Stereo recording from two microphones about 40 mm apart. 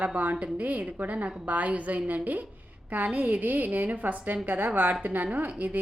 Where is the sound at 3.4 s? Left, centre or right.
Right.